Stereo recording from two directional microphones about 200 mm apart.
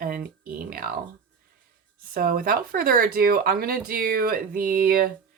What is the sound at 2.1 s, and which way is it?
Speech, 45° right (ahead or behind).